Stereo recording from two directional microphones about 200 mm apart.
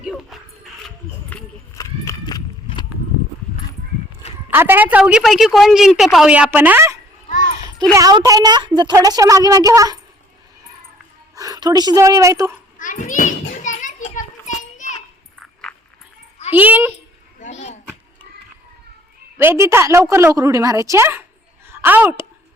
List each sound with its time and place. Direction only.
0.0 s music: centre (ahead or behind)
1.7 s horse: 15° left (ahead or behind)
4.5 s a woman's voice: 10° right (ahead or behind)
11.3 s a woman's voice: 20° right (ahead or behind)
12.8 s children playing: 40° left (ahead or behind)
16.5 s a woman's voice: 10° right (ahead or behind)
17.4 s a sound: 35° left (ahead or behind)
19.4 s a woman's voice: 10° right (ahead or behind)